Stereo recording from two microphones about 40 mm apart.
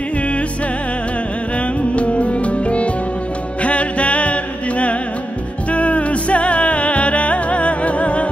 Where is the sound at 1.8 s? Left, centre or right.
Left.